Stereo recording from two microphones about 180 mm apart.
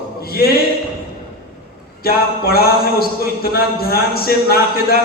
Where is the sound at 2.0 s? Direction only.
55° left (ahead or behind).